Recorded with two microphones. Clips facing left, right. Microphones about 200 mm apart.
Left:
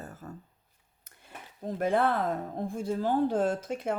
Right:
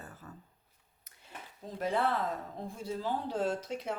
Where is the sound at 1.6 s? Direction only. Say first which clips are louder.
Left 5 dB; 55° left (ahead or behind).